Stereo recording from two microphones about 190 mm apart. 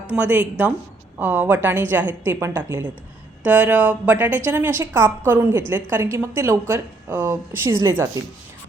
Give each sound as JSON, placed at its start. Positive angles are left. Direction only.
{"t": 0.1, "sound": "a woman's voice", "side_deg": -10}